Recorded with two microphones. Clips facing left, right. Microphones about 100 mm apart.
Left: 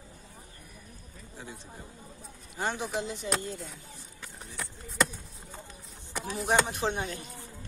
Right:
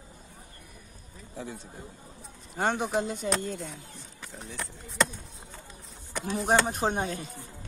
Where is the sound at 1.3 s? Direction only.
75° right (ahead or behind).